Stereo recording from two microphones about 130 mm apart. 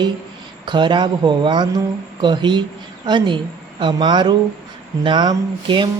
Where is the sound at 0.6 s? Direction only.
35° right (ahead or behind).